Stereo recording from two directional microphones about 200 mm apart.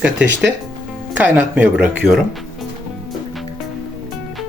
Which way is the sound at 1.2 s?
10° right (ahead or behind).